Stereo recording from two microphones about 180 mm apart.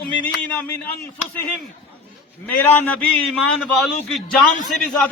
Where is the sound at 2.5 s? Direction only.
10° left (ahead or behind).